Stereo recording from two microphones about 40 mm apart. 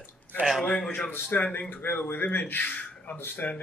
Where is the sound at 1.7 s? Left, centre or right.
Left.